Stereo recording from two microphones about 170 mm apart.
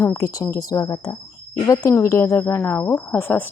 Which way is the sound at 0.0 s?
15° left (ahead or behind).